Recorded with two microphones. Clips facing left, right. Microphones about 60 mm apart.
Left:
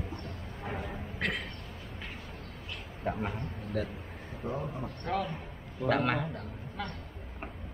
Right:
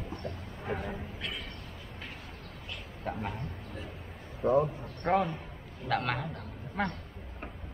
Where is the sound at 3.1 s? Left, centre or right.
Centre.